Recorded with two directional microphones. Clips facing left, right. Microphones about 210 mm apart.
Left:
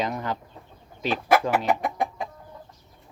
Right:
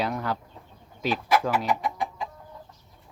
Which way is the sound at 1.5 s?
50° left (ahead or behind).